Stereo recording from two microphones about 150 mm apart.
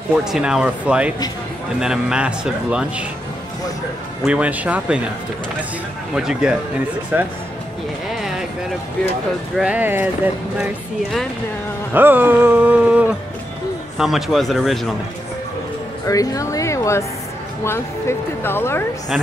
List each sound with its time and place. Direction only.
0.1 s speech: 5° right (ahead or behind)
4.3 s speech: 10° right (ahead or behind)
6.1 s speech: 5° right (ahead or behind)
9.6 s speech: 10° right (ahead or behind)
16.1 s speech: 20° left (ahead or behind)